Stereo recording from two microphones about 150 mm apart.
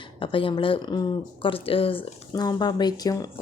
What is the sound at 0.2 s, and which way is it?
A woman's voice, 35° left (ahead or behind).